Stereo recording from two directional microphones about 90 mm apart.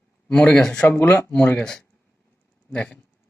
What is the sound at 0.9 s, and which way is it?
Speech, 20° left (ahead or behind).